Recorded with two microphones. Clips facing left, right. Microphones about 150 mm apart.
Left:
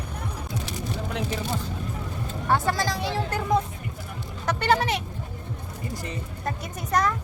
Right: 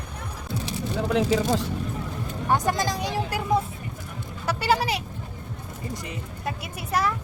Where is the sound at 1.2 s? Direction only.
90° right.